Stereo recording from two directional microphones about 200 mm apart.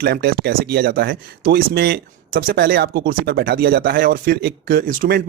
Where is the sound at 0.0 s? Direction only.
50° right (ahead or behind).